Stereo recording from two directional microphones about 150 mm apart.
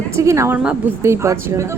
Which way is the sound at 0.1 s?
20° right (ahead or behind).